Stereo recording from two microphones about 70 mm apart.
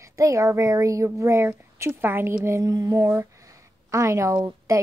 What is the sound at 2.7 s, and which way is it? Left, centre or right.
A woman's voice, right.